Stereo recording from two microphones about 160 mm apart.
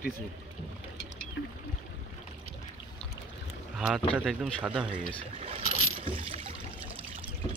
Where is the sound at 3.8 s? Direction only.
Centre (ahead or behind).